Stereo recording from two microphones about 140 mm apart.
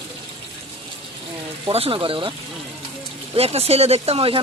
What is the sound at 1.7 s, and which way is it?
Speech, 45° right (ahead or behind).